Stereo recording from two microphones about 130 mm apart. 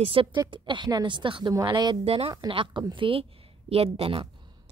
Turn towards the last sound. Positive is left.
turn(degrees=-35)  # may be behind; listen again after turning